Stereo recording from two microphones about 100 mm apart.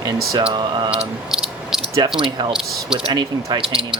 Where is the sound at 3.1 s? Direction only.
45° right (ahead or behind).